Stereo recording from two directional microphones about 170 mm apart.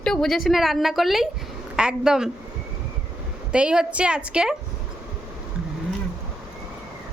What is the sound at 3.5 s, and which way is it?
A woman's voice, 5° right (ahead or behind).